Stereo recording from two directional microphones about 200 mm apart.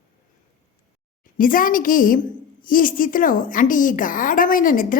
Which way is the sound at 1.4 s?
45° left (ahead or behind).